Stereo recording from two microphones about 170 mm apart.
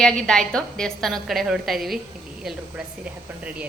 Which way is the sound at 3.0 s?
5° right (ahead or behind).